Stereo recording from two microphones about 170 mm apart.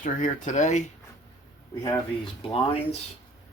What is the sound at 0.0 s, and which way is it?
Speech, 45° left (ahead or behind).